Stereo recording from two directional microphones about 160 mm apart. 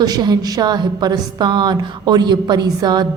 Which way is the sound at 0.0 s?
25° right (ahead or behind).